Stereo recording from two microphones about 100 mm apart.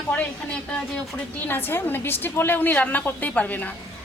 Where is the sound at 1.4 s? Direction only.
20° left (ahead or behind).